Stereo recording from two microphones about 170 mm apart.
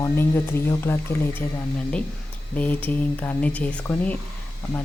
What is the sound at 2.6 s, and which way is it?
Speech, 10° left (ahead or behind).